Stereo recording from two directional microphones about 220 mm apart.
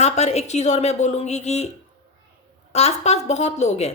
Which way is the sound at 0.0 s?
30° left (ahead or behind).